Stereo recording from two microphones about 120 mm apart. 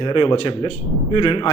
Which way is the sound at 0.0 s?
45° left (ahead or behind).